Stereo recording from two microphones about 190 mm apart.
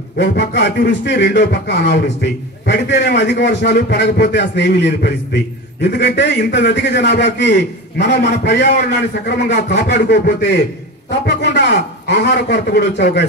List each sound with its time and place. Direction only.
0.2 s speech: 65° left (ahead or behind)